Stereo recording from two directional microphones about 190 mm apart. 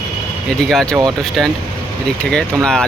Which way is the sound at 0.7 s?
Centre (ahead or behind).